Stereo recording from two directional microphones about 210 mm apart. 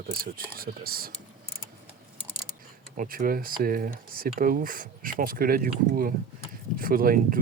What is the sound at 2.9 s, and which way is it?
Speech, 40° right (ahead or behind).